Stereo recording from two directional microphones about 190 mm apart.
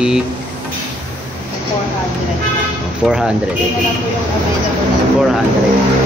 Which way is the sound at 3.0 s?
Centre (ahead or behind).